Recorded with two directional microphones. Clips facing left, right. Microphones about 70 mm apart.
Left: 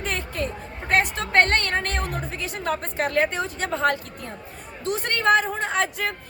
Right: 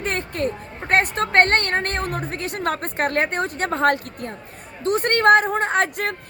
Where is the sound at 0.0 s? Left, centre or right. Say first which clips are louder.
Right 4 dB; right.